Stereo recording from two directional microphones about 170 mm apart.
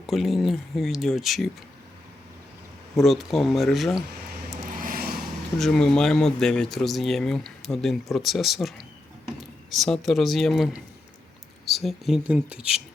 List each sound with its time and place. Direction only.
0.1 s speech: centre (ahead or behind)
3.0 s speech: centre (ahead or behind)
4.8 s vehicle: 60° right (ahead or behind)
5.5 s speech: centre (ahead or behind)